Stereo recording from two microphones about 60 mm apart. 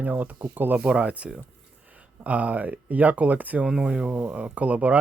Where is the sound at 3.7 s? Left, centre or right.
Centre.